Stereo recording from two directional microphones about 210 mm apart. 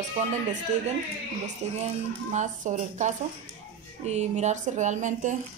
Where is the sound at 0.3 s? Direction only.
35° right (ahead or behind).